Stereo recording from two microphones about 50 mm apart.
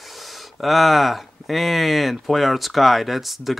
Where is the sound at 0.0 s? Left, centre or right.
Centre.